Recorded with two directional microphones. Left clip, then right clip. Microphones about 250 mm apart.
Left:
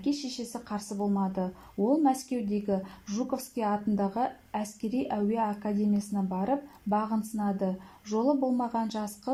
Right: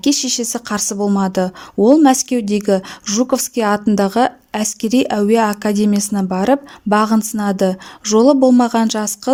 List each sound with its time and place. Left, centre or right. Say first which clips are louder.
0.0 s a woman's voice: right 16 dB; right